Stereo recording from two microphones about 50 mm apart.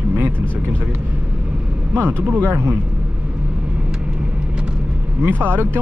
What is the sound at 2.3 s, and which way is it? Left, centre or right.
Speech, right.